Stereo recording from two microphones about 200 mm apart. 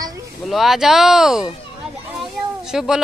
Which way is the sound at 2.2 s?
Centre (ahead or behind).